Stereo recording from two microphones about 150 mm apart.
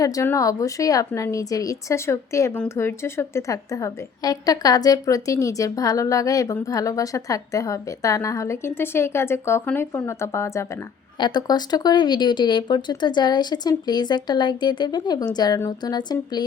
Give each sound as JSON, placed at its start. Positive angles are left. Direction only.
{"t": 0.0, "sound": "a woman's voice", "side_deg": 20}